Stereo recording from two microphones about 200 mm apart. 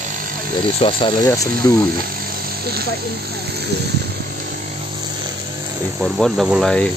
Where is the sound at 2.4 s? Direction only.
50° right (ahead or behind).